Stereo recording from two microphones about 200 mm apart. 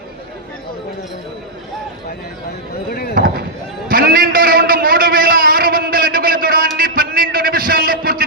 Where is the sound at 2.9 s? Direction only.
50° left (ahead or behind).